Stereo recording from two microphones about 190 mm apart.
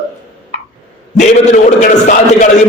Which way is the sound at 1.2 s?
40° left (ahead or behind).